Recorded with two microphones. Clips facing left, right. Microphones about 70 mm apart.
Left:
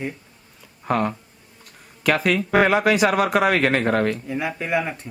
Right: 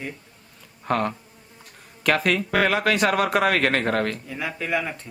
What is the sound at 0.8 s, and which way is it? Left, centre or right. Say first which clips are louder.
Insect: left 2 dB; centre.